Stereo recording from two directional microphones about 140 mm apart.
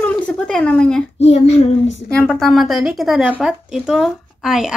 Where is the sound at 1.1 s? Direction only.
50° left (ahead or behind).